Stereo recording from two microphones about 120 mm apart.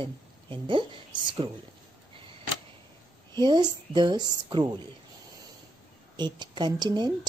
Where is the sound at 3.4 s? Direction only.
35° right (ahead or behind).